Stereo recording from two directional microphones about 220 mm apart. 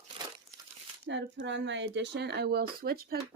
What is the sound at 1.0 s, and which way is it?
Speech, 55° right (ahead or behind).